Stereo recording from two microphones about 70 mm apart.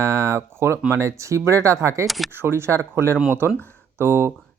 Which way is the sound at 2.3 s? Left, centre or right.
Right.